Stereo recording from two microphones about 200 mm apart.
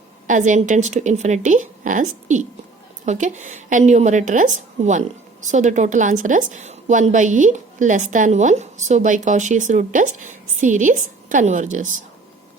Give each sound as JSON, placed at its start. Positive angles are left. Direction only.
{"t": 0.3, "sound": "speech", "side_deg": -40}